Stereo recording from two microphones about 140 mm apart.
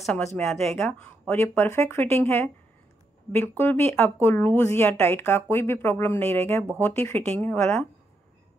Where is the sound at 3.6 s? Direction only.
15° left (ahead or behind).